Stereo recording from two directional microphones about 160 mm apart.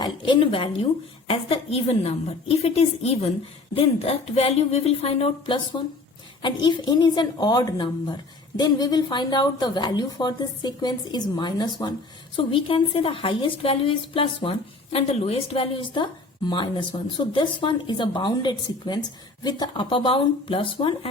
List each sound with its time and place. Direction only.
0.0 s a woman's voice: 30° left (ahead or behind)